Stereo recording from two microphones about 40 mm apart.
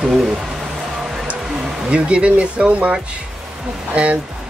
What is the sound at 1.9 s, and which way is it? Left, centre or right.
Speech, right.